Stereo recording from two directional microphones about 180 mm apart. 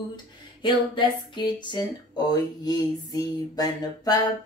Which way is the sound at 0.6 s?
25° left (ahead or behind).